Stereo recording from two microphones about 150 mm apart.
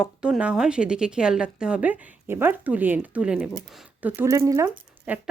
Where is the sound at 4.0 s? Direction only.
15° right (ahead or behind).